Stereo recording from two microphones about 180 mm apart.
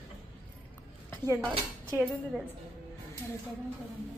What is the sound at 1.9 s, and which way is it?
Speech, 10° right (ahead or behind).